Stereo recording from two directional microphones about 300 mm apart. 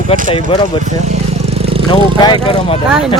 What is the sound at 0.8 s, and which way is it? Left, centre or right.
Vehicle, right.